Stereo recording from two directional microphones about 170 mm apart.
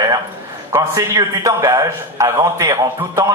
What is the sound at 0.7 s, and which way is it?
A man's voice, 20° right (ahead or behind).